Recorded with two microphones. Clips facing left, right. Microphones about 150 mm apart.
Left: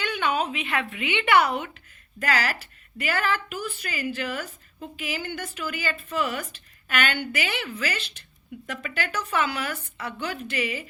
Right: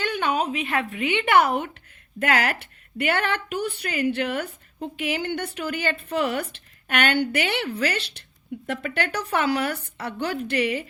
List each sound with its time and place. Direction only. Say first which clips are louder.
0.0 s a sound: right 2 dB; 45° right (ahead or behind)
0.5 s a woman's voice: right 3 dB; 40° right (ahead or behind)
3.0 s a woman's voice: right 2 dB; 65° right (ahead or behind); by 6.5 s 45° right (ahead or behind)
6.5 s speech: right 2 dB; 55° right (ahead or behind)